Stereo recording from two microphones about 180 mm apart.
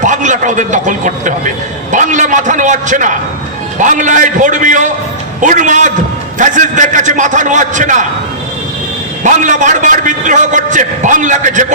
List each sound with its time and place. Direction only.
0.0 s a man's voice: 45° right (ahead or behind)
9.2 s a man's voice: 45° right (ahead or behind)